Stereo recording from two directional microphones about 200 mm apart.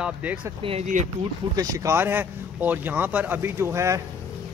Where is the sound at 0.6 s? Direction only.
30° right (ahead or behind).